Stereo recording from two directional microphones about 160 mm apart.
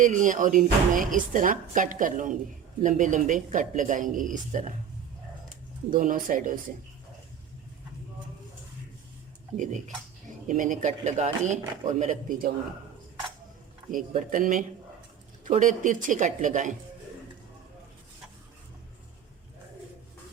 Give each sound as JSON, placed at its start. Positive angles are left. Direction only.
{"t": 0.0, "sound": "speech", "side_deg": -55}
{"t": 5.9, "sound": "speech", "side_deg": -55}
{"t": 9.6, "sound": "speech", "side_deg": -50}
{"t": 13.9, "sound": "speech", "side_deg": -55}